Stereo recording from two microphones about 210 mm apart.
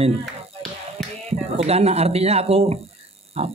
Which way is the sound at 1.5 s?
30° right (ahead or behind).